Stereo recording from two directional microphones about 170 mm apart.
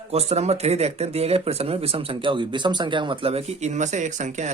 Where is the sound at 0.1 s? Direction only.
40° right (ahead or behind).